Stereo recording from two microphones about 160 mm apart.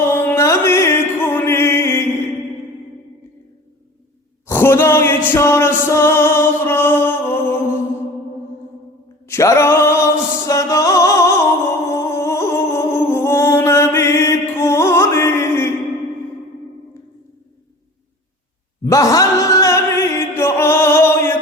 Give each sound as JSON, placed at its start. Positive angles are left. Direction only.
{"t": 0.0, "sound": "music", "side_deg": 15}
{"t": 4.4, "sound": "music", "side_deg": 15}
{"t": 9.2, "sound": "music", "side_deg": 15}
{"t": 11.9, "sound": "humming", "side_deg": 15}
{"t": 18.9, "sound": "chant", "side_deg": 20}